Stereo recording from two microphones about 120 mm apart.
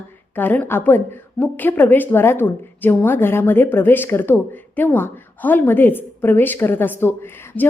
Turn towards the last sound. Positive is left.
turn(degrees=20)  # may be behind; listen again after turning